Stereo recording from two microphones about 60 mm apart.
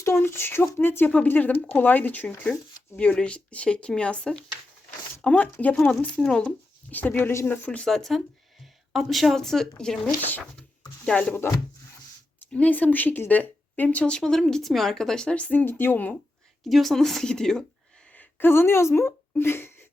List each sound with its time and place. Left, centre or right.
0.2 s speech: left
5.7 s speech: centre
6.9 s speech: left
7.2 s speech: left
7.4 s speech: left
7.9 s speech: centre
11.0 s speech: centre
12.5 s speech: left
14.2 s speech: centre
15.6 s speech: left
16.6 s speech: centre
18.1 s a woman's voice: left